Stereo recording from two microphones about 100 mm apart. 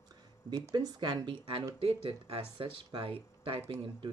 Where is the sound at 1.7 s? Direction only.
75° right (ahead or behind); by 4.1 s 55° right (ahead or behind).